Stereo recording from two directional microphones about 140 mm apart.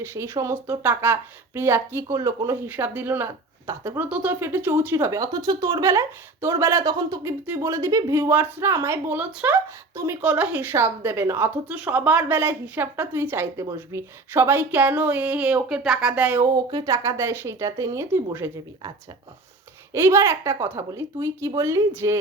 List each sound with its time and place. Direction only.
0.0 s a woman's voice: 20° right (ahead or behind)
16.7 s speech: 25° right (ahead or behind)
19.9 s speech: 20° right (ahead or behind)